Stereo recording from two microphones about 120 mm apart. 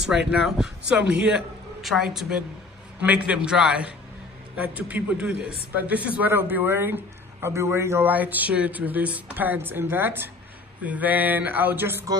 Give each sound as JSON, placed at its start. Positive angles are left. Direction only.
{"t": 0.1, "sound": "a man's voice", "side_deg": -5}